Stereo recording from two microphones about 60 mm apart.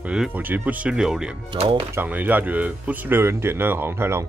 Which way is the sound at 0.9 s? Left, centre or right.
Centre.